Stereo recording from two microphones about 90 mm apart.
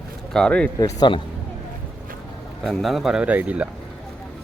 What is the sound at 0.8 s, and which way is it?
Speech, 50° left (ahead or behind).